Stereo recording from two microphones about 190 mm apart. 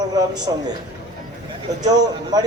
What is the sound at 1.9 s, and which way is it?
Speech, 20° right (ahead or behind).